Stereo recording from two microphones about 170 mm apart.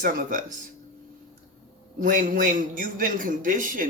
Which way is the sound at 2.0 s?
50° right (ahead or behind).